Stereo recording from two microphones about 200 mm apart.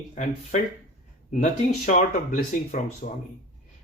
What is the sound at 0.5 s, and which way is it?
Speech, 40° left (ahead or behind).